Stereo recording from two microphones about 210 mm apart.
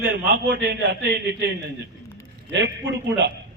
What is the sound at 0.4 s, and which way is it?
A man's voice, 50° right (ahead or behind).